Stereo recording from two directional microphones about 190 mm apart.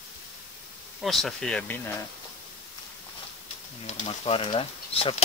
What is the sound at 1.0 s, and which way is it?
Speech, centre (ahead or behind).